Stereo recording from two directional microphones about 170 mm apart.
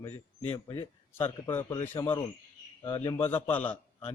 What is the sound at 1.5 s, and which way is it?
A man's voice, 15° left (ahead or behind).